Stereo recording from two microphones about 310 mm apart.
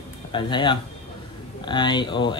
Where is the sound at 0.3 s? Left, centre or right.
Centre.